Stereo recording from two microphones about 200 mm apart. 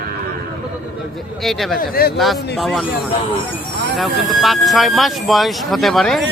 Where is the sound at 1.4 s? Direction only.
Centre (ahead or behind).